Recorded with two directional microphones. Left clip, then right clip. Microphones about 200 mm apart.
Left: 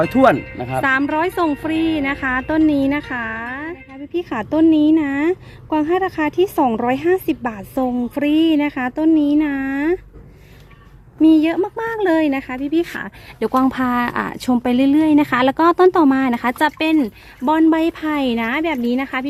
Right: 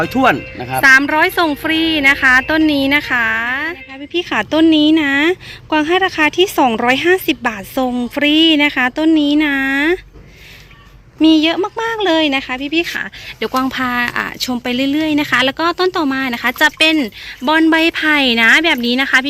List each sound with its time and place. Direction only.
0.0 s speech: 35° left (ahead or behind)
0.8 s a woman's voice: centre (ahead or behind)
11.2 s speech: 5° left (ahead or behind)
12.7 s speech: 25° left (ahead or behind); by 19.3 s centre (ahead or behind)